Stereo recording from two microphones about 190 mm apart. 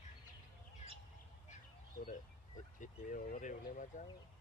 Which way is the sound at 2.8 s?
45° left (ahead or behind).